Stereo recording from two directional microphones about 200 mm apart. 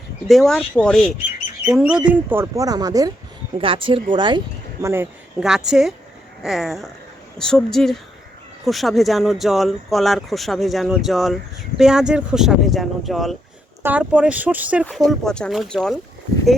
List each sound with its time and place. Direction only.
0.3 s speech: centre (ahead or behind); by 5.0 s 15° right (ahead or behind)
5.4 s speech: 5° right (ahead or behind)